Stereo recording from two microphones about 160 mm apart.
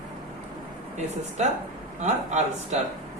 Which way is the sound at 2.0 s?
50° right (ahead or behind).